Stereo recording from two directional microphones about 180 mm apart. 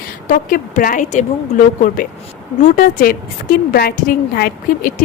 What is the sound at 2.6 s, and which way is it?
A woman's voice, 50° left (ahead or behind).